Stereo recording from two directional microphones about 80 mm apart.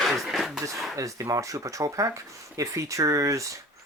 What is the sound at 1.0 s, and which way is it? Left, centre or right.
Speech, right.